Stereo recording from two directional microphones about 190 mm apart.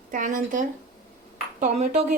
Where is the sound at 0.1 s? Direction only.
45° right (ahead or behind).